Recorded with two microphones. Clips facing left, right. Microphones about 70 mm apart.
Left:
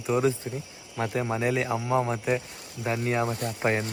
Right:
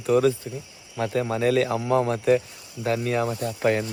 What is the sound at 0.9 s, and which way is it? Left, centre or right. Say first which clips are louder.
Speech: right 3 dB; centre.